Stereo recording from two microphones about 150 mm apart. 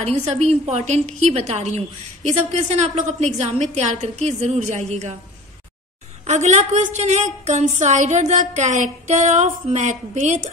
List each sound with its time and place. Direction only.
0.0 s a woman's voice: 45° right (ahead or behind)
6.2 s a woman's voice: 50° right (ahead or behind)